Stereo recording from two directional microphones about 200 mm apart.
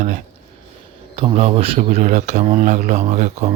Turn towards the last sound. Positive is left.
turn(degrees=-35)  # may be behind; listen again after turning